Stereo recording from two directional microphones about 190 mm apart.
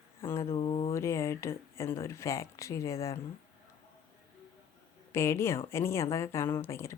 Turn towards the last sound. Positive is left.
turn(degrees=15)  # may be behind; listen again after turning